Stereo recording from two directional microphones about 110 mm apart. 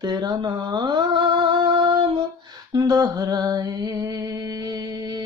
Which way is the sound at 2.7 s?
35° right (ahead or behind).